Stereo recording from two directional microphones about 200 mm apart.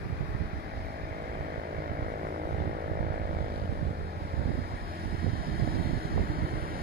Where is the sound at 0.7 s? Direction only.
50° right (ahead or behind).